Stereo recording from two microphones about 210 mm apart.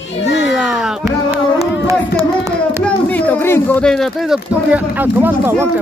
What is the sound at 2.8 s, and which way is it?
Speech, 5° left (ahead or behind).